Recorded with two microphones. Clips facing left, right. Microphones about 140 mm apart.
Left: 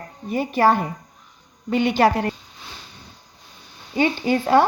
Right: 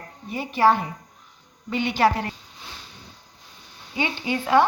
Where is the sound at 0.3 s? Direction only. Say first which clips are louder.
Left 2 dB; 45° left (ahead or behind).